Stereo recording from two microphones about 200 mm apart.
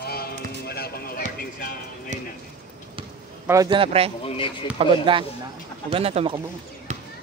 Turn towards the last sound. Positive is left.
turn(degrees=-35)  # may be behind; listen again after turning